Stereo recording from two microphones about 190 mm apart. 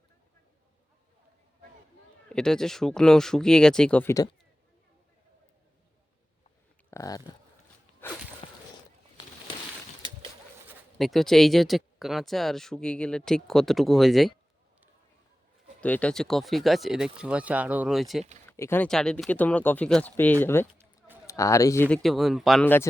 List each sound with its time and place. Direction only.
2.3 s speech: 5° left (ahead or behind)
6.9 s speech: 20° left (ahead or behind)
8.0 s a sound: 10° left (ahead or behind)
8.4 s a sound: 30° left (ahead or behind)
10.9 s speech: centre (ahead or behind)
15.8 s speech: 5° left (ahead or behind)
18.4 s speech: 15° left (ahead or behind)